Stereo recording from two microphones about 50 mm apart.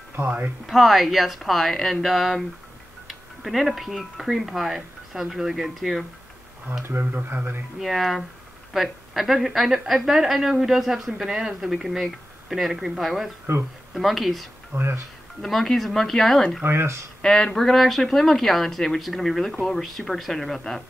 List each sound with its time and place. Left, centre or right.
0.7 s speech: centre
3.1 s a sound: centre
4.2 s speech: centre
6.8 s speech: right
7.8 s speech: centre
14.8 s speech: right
15.4 s speech: centre
16.6 s speech: right
17.2 s speech: centre